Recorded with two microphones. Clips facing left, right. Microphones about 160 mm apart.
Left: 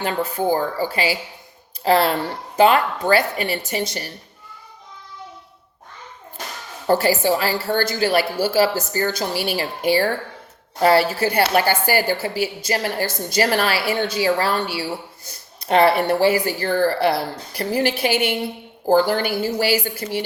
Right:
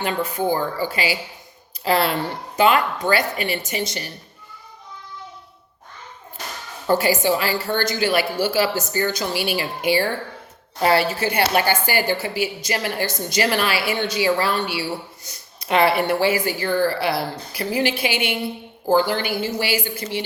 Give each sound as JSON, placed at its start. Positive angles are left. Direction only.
{"t": 0.0, "sound": "speech", "side_deg": 30}
{"t": 0.5, "sound": "a woman's voice", "side_deg": 40}
{"t": 6.8, "sound": "a woman's voice", "side_deg": 35}
{"t": 15.6, "sound": "speech", "side_deg": 50}
{"t": 16.6, "sound": "a woman's voice", "side_deg": 50}